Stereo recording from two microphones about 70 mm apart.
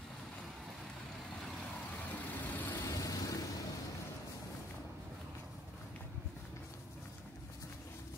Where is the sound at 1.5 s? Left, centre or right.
Centre.